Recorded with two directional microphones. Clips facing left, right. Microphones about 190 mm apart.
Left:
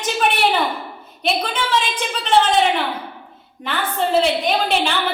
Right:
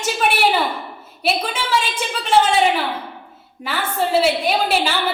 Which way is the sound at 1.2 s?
5° right (ahead or behind).